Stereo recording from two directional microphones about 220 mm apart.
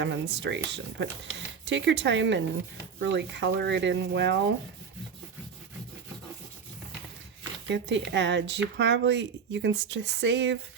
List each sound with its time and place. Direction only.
0.0 s speech: 50° right (ahead or behind)
7.7 s speech: 55° right (ahead or behind)